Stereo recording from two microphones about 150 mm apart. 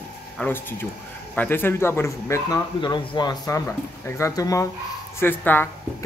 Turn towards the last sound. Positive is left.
turn(degrees=15)  # may be behind; listen again after turning